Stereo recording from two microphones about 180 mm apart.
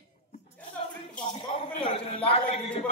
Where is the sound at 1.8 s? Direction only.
30° left (ahead or behind).